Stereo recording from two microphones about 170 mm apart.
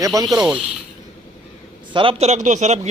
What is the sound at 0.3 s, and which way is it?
Speech, 5° right (ahead or behind).